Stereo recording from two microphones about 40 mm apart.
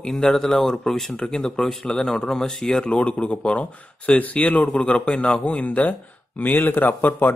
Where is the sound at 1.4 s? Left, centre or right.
Centre.